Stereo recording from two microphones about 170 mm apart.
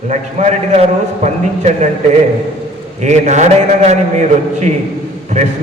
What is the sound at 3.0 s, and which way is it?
A man's voice, 45° right (ahead or behind).